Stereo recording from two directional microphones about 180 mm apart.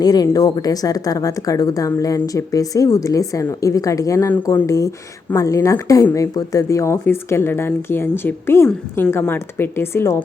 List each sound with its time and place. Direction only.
0.0 s a woman's voice: 20° left (ahead or behind)